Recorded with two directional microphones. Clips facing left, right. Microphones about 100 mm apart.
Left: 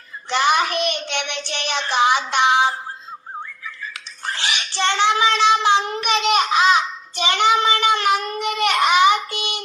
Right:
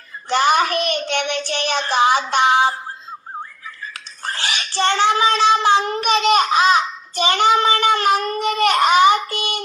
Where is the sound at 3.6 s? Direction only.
40° right (ahead or behind).